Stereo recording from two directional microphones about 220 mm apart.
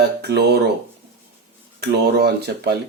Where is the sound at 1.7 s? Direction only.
45° right (ahead or behind).